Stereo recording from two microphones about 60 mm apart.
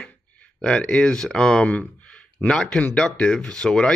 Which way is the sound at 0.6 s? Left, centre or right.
Centre.